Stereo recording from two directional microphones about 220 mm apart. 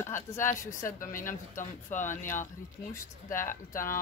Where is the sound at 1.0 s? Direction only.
40° left (ahead or behind).